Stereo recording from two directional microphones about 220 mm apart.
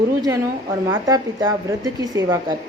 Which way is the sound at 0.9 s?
15° right (ahead or behind).